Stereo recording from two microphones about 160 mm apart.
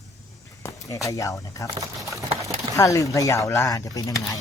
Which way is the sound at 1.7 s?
20° right (ahead or behind).